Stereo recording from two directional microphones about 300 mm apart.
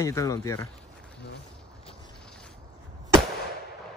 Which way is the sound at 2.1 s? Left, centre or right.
Centre.